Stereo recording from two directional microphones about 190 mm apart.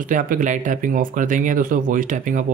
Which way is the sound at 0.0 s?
45° right (ahead or behind).